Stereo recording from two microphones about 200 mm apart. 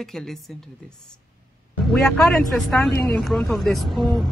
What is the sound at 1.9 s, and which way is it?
Speech, centre (ahead or behind).